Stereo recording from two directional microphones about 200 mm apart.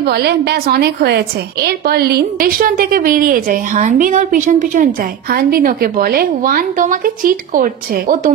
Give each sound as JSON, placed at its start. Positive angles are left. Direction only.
{"t": 0.0, "sound": "a woman's voice", "side_deg": -55}